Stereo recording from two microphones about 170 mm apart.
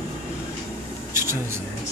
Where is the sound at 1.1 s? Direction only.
15° right (ahead or behind).